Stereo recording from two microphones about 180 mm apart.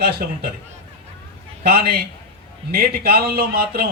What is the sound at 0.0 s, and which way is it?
Speech, 55° right (ahead or behind).